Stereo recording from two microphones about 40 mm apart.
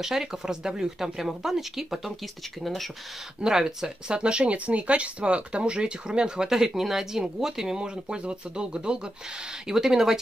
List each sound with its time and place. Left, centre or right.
0.0 s speech: centre
3.3 s speech: centre
9.7 s speech: centre